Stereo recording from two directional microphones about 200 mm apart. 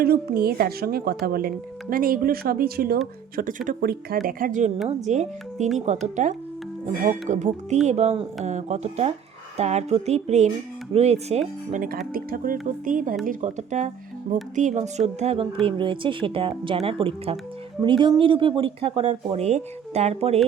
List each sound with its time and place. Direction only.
0.0 s speech: 50° right (ahead or behind); by 20.4 s 30° right (ahead or behind)